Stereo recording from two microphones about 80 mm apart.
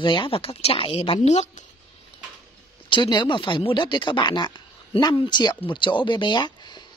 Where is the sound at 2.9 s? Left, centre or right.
Left.